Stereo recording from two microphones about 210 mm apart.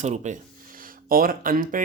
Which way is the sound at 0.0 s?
35° right (ahead or behind).